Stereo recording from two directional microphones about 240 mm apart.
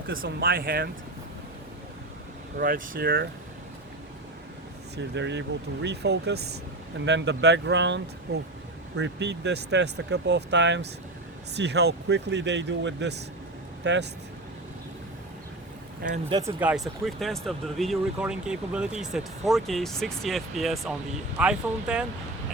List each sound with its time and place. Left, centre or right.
0.3 s speech: right
2.6 s speech: right
4.9 s speech: right
16.3 s speech: centre